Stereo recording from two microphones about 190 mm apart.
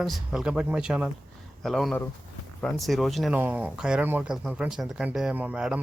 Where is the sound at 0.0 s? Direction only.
Centre (ahead or behind).